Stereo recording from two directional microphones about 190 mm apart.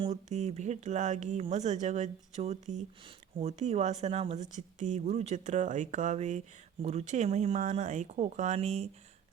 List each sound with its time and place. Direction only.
0.0 s speech: 35° right (ahead or behind)